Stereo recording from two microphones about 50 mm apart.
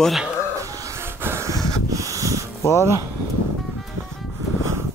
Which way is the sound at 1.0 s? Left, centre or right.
Right.